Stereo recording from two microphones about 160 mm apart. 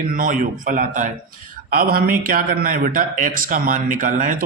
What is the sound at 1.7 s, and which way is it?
A man's voice, 65° right (ahead or behind).